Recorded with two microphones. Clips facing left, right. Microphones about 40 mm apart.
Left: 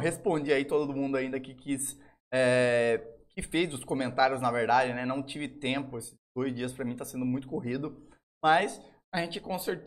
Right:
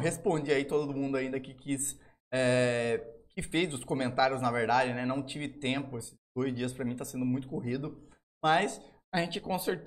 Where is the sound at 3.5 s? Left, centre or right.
Centre.